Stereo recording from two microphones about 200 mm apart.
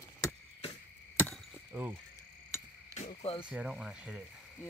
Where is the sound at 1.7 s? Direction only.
10° right (ahead or behind).